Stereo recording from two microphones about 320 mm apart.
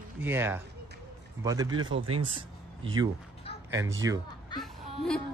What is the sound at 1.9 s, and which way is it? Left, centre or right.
Speech, right.